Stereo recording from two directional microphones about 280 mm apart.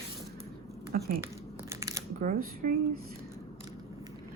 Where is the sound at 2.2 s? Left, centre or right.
Right.